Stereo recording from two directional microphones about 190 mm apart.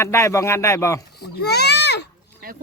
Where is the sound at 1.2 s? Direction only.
60° left (ahead or behind).